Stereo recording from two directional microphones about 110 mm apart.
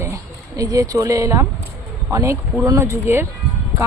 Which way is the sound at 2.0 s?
25° right (ahead or behind).